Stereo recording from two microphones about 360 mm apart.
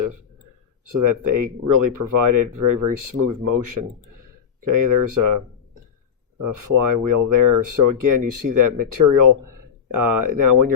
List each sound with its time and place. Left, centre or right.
0.9 s speech: right
6.4 s speech: right